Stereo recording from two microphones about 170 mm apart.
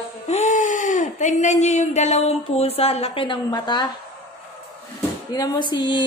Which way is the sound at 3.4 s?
25° left (ahead or behind).